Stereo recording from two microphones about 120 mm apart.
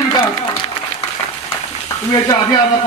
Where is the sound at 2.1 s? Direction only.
40° left (ahead or behind).